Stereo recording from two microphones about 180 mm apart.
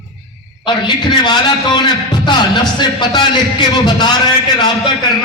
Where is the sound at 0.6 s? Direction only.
25° left (ahead or behind).